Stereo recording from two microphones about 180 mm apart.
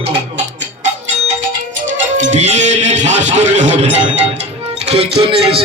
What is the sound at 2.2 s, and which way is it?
Music, 40° right (ahead or behind).